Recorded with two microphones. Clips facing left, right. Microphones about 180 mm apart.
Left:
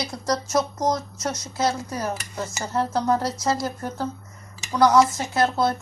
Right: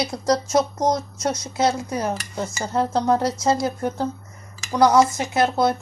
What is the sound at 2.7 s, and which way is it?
Speech, 20° right (ahead or behind).